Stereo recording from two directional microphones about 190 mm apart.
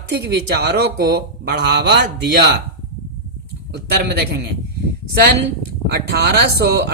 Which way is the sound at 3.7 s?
60° right (ahead or behind).